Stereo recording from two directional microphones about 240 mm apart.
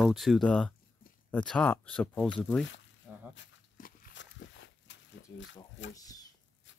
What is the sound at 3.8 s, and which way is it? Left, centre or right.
Walk, left.